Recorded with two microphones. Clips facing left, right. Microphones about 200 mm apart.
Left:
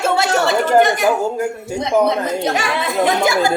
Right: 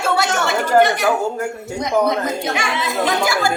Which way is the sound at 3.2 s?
20° left (ahead or behind).